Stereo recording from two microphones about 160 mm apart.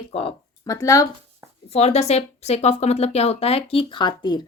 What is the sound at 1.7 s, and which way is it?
Speech, 40° left (ahead or behind).